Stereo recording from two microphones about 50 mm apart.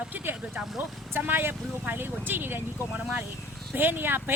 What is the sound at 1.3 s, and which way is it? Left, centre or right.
Speech, right.